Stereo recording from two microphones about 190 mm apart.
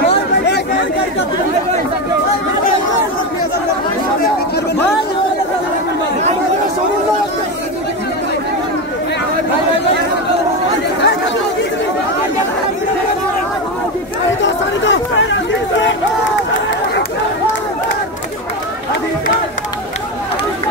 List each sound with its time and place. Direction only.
14.4 s chatter: 75° left (ahead or behind)